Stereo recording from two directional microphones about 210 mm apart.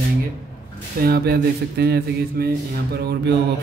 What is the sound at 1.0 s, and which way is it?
A man's voice, 45° right (ahead or behind).